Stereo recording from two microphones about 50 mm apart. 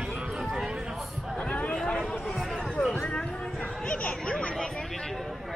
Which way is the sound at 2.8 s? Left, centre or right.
Centre.